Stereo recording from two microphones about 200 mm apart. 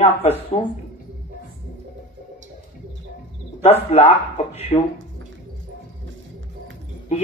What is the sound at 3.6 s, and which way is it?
Speech, 30° left (ahead or behind).